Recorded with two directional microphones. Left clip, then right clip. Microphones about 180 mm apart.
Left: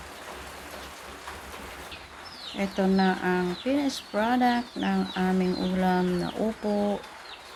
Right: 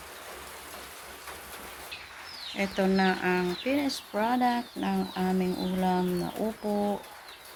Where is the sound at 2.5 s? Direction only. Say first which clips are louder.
Left 1 dB; centre (ahead or behind).